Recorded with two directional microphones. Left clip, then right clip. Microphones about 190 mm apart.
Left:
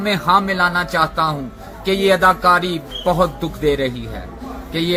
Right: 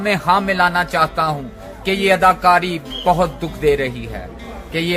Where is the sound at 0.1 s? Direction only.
15° right (ahead or behind).